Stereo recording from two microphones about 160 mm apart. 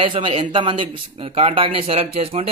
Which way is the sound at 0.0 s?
35° right (ahead or behind).